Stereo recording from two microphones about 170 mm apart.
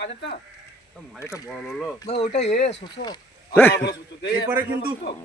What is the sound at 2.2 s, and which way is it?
Speech, 40° left (ahead or behind).